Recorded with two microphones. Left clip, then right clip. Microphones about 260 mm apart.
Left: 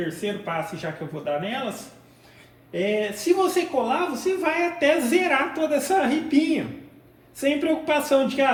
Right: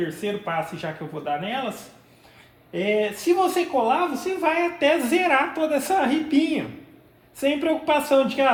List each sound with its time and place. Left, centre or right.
0.2 s speech: centre
3.0 s a woman's voice: centre